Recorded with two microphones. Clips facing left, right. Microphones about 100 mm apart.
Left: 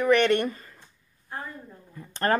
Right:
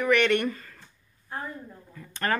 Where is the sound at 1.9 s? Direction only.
30° left (ahead or behind).